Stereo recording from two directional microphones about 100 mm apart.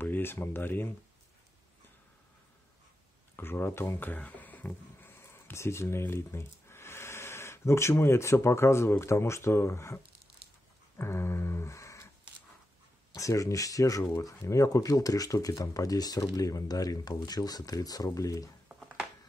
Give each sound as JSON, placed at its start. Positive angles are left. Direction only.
{"t": 0.0, "sound": "speech", "side_deg": 20}
{"t": 3.3, "sound": "speech", "side_deg": 20}
{"t": 11.0, "sound": "a sound", "side_deg": 25}
{"t": 13.1, "sound": "speech", "side_deg": 35}